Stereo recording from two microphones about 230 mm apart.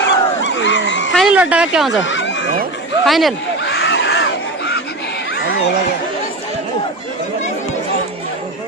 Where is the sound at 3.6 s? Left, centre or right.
Left.